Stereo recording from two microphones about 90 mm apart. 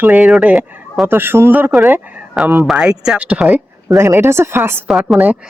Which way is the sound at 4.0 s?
30° right (ahead or behind).